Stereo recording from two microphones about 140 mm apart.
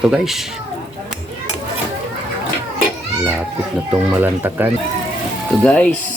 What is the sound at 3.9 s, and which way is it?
Speech, 15° right (ahead or behind).